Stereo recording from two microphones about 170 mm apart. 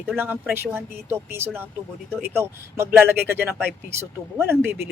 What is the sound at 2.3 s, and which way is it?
Speech, 15° right (ahead or behind).